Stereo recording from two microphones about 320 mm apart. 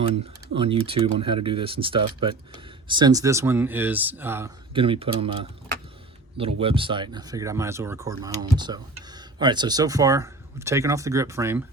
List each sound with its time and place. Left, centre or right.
0.1 s speech: centre